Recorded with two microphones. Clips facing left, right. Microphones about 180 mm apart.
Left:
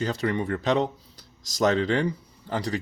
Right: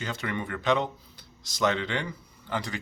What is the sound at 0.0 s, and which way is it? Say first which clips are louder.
Speech: left 7 dB; 35° left (ahead or behind).